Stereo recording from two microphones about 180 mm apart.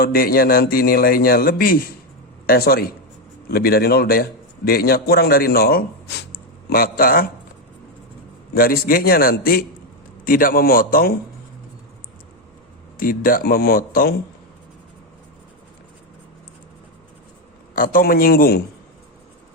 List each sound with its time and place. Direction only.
0.0 s a man's voice: 55° left (ahead or behind)
8.5 s a man's voice: 55° left (ahead or behind)
13.0 s a man's voice: 50° left (ahead or behind)
17.7 s a man's voice: 50° left (ahead or behind)